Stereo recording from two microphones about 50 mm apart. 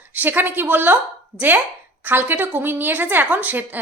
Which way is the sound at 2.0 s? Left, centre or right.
Right.